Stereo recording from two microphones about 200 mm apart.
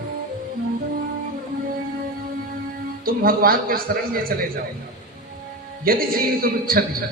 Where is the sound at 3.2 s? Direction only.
45° right (ahead or behind).